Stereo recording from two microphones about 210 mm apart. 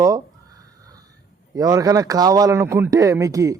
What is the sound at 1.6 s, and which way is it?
Speech, 15° right (ahead or behind).